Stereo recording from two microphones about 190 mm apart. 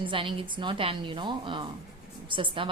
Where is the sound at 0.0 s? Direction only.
25° right (ahead or behind).